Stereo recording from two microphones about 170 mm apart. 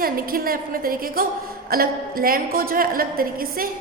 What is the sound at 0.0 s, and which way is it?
A woman's voice, 60° right (ahead or behind).